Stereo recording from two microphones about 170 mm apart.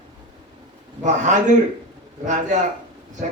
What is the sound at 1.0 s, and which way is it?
Speech, 45° right (ahead or behind).